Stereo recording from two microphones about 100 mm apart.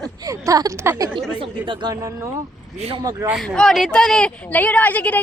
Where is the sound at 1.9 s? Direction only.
30° right (ahead or behind).